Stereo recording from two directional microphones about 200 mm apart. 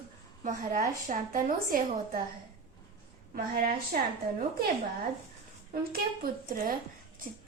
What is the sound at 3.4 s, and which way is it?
Speech, 45° right (ahead or behind).